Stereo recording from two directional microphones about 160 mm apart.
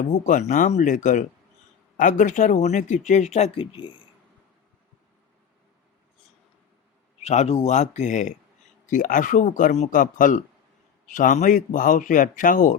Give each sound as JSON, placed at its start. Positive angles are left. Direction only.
{"t": 0.0, "sound": "speech", "side_deg": 50}
{"t": 7.2, "sound": "speech", "side_deg": 45}